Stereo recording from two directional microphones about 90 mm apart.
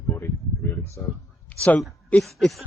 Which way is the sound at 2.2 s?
Centre (ahead or behind).